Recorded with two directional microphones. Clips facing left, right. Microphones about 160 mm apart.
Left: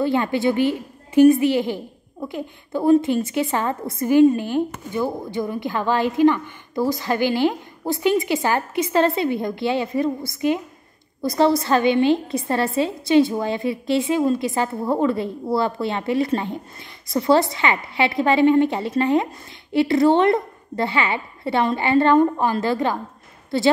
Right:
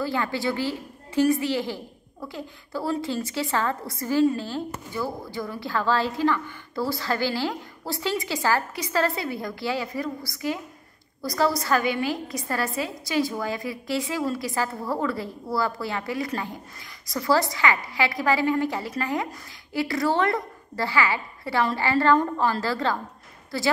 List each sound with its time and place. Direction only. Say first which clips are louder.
0.0 s a woman's voice: left 7 dB; 20° left (ahead or behind)